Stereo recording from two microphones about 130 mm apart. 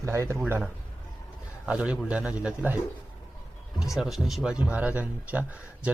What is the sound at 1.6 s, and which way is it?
Speech, 10° right (ahead or behind).